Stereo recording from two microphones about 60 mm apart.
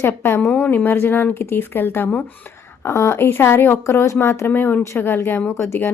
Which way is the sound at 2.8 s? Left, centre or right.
Left.